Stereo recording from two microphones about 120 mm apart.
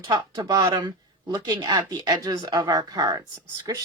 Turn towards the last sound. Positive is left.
turn(degrees=-35)  # may be behind; listen again after turning